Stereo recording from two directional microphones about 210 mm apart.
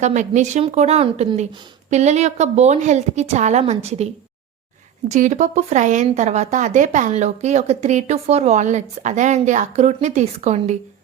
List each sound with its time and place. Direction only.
0.0 s a woman's voice: 35° right (ahead or behind)